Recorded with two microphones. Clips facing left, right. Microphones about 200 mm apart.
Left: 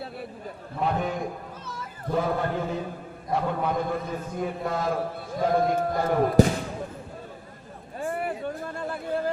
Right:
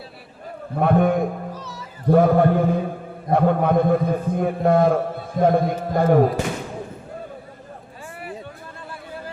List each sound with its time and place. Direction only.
0.8 s a man's voice: 55° right (ahead or behind)
1.5 s cat: 50° left (ahead or behind)
2.0 s a man's voice: 55° right (ahead or behind)
8.0 s a sound: 50° left (ahead or behind)